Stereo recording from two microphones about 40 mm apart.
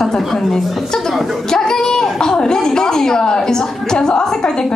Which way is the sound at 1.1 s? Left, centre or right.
Centre.